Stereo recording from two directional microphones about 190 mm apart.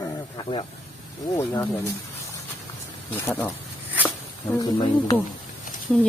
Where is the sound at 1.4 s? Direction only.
15° left (ahead or behind).